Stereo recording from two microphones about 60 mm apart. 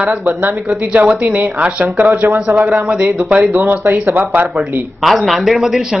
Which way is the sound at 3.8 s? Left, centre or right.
Right.